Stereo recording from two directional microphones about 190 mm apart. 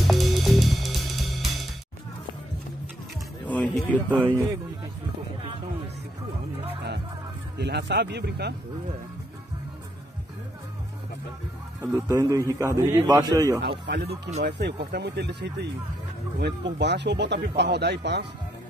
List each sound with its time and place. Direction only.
0.0 s music: centre (ahead or behind)
3.4 s a sound: 10° left (ahead or behind)
7.5 s speech: 60° right (ahead or behind)
11.8 s a man's voice: 15° right (ahead or behind)
13.7 s speech: 60° right (ahead or behind)